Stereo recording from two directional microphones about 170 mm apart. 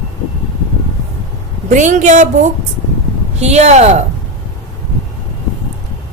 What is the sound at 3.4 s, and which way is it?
Speech, 40° right (ahead or behind).